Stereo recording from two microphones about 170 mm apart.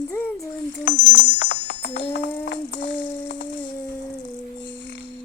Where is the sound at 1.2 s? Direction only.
90° left.